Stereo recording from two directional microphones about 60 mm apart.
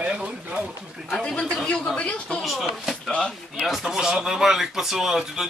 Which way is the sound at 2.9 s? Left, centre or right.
Centre.